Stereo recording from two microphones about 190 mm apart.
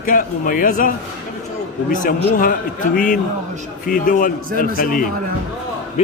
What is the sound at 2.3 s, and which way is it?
Speech, 45° left (ahead or behind).